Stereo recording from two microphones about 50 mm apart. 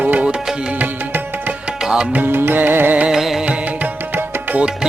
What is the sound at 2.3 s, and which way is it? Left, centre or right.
Music, right.